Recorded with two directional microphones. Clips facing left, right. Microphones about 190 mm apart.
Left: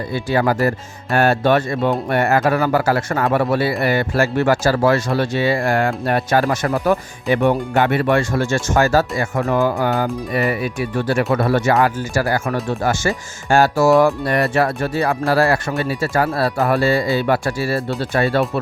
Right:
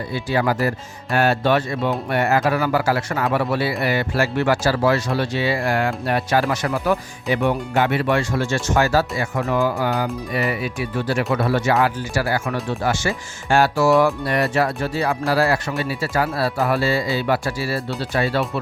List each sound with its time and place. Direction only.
0.1 s speech: 50° left (ahead or behind)